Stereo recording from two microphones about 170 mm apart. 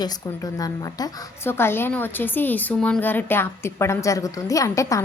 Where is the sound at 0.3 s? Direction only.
20° left (ahead or behind).